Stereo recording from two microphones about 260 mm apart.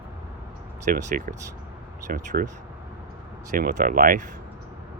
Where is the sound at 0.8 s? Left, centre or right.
Right.